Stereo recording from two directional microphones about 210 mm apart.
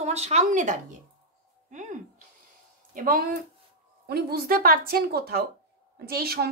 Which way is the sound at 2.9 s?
40° right (ahead or behind).